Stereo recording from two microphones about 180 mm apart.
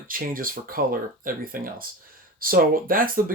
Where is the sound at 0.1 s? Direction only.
50° right (ahead or behind).